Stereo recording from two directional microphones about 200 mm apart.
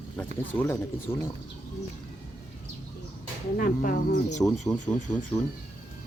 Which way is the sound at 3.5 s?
45° left (ahead or behind).